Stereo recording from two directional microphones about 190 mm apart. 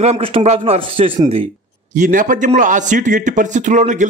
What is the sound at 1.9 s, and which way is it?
A man's voice, 40° right (ahead or behind).